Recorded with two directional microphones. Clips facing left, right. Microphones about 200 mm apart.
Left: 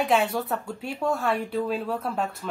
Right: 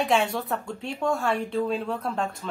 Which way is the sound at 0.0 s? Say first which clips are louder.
Left 1 dB; centre (ahead or behind).